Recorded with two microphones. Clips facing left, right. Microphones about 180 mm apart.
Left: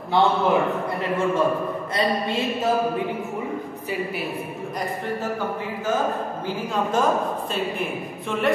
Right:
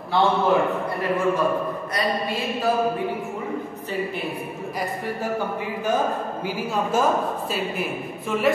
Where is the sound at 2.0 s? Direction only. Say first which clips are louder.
Left 2 dB; 25° left (ahead or behind).